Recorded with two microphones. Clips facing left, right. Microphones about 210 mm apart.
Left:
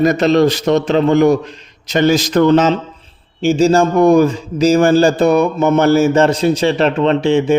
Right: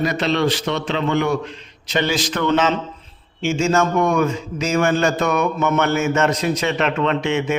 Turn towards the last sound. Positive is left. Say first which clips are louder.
# left 7 dB
turn(degrees=30)  # may be behind; listen again after turning